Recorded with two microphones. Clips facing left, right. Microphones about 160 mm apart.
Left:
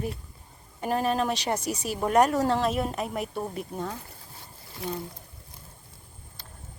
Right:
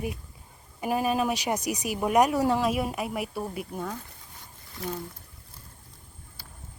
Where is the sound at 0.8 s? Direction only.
10° right (ahead or behind).